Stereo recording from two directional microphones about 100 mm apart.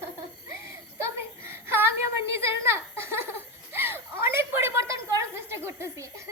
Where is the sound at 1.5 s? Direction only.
25° right (ahead or behind).